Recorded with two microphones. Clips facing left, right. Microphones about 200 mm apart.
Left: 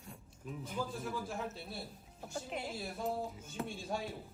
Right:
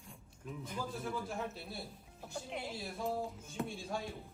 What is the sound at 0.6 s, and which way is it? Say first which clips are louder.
A man's voice: left 1 dB; centre (ahead or behind).